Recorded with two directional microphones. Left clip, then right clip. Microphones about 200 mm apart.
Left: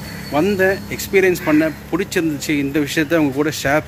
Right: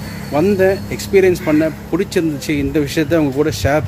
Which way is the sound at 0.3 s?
Centre (ahead or behind).